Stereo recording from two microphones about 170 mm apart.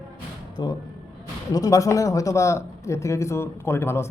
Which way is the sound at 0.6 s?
25° left (ahead or behind).